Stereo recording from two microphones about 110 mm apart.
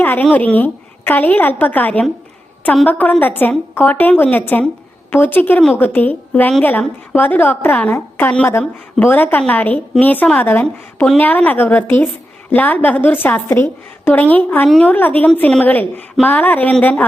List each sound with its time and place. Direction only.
0.0 s a woman's voice: 20° left (ahead or behind)